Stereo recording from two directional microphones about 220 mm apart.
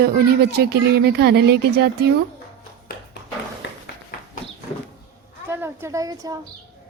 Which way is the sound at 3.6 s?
55° left (ahead or behind).